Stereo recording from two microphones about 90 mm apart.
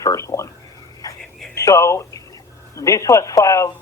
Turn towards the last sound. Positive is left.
turn(degrees=35)  # may be behind; listen again after turning